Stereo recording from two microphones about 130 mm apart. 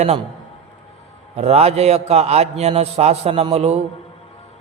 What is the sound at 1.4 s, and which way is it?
A man's voice, 50° right (ahead or behind).